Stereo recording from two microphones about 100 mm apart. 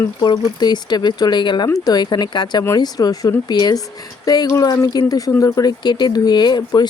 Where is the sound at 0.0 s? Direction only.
40° left (ahead or behind).